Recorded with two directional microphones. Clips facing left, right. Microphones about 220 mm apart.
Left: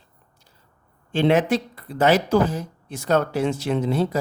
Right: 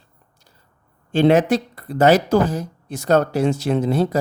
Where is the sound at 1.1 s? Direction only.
40° right (ahead or behind).